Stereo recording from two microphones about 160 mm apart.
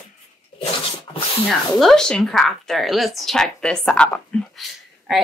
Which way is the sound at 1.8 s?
Centre (ahead or behind).